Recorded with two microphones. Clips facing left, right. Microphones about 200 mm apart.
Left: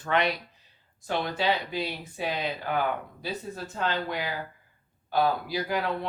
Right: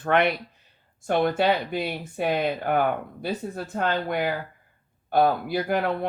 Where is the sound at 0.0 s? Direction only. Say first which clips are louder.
Right 5 dB; 55° right (ahead or behind).